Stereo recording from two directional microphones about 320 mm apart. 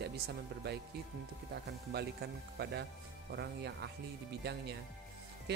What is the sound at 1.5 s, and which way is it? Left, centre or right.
Speech, right.